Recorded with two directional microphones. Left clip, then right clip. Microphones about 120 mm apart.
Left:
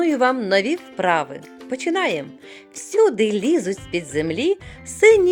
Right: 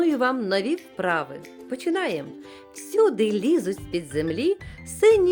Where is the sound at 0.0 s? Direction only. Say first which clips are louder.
Left 4 dB; 10° left (ahead or behind).